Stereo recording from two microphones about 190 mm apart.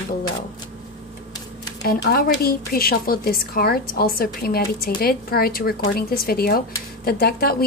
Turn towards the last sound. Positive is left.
turn(degrees=55)  # may be behind; listen again after turning